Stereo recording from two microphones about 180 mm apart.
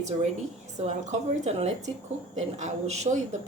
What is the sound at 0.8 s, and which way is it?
A woman's voice, 40° right (ahead or behind).